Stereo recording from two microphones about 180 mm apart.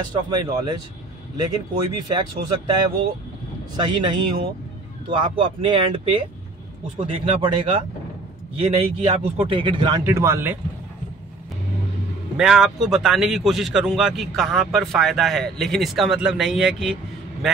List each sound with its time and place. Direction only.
0.1 s speech: 20° right (ahead or behind)
3.7 s speech: 25° right (ahead or behind)
10.0 s speech: 15° right (ahead or behind)
12.4 s speech: centre (ahead or behind)